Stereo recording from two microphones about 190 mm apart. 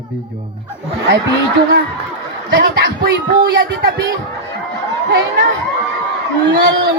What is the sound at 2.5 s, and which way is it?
Speech, 60° right (ahead or behind).